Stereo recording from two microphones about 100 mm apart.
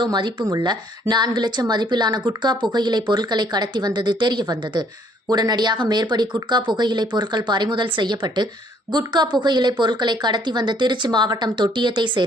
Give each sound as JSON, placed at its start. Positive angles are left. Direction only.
{"t": 0.0, "sound": "speech", "side_deg": -45}